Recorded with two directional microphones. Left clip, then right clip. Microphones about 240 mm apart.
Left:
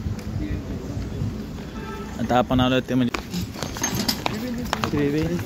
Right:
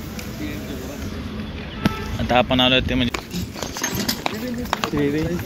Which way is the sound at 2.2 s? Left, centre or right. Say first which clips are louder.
Right 4 dB; left.